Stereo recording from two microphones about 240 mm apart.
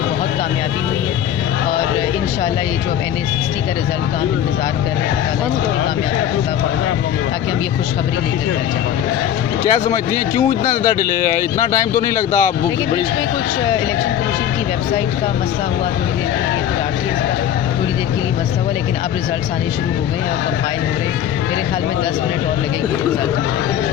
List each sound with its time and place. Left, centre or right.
9.6 s speech: left
10.8 s speech: centre